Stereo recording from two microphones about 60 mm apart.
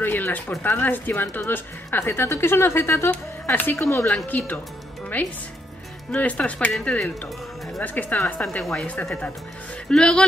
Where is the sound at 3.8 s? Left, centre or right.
Left.